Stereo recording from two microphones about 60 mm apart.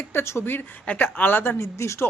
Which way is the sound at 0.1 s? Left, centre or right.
Left.